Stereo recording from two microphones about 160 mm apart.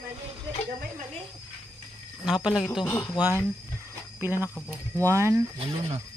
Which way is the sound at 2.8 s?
10° left (ahead or behind).